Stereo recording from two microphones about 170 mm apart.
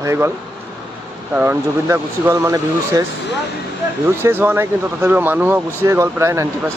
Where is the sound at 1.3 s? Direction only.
15° right (ahead or behind).